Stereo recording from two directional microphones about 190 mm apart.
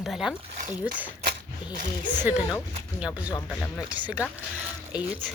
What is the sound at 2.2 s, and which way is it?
Speech, 5° right (ahead or behind).